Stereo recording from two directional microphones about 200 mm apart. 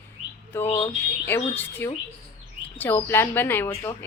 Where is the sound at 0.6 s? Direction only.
30° left (ahead or behind).